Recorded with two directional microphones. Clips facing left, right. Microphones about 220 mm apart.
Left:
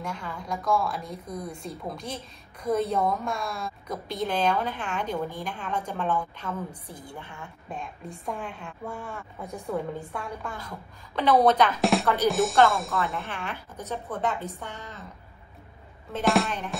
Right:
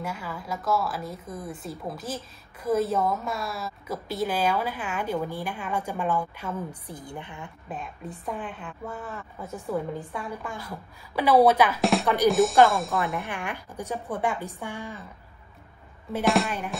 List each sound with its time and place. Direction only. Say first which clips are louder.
0.0 s a woman's voice: right 1 dB; 5° right (ahead or behind)
7.7 s speech: right 1 dB; 5° right (ahead or behind)
13.2 s a woman's voice: right 2 dB; 15° right (ahead or behind)
16.3 s speech: even; centre (ahead or behind)